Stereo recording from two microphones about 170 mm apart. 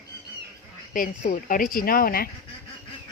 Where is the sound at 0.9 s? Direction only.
50° left (ahead or behind).